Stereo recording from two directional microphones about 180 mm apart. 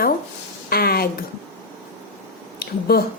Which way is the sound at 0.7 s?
60° left (ahead or behind).